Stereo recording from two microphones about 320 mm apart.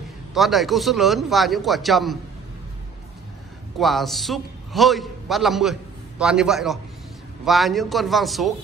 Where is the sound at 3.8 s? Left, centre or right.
Centre.